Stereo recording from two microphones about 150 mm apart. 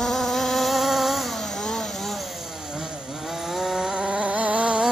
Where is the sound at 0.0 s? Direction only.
Centre (ahead or behind).